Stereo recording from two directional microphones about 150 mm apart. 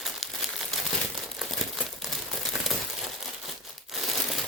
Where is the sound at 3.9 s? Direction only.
Centre (ahead or behind).